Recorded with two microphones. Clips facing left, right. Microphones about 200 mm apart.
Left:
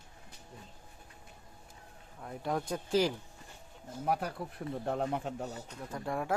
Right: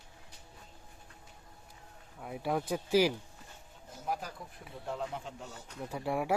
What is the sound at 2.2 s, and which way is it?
Speech, 5° right (ahead or behind).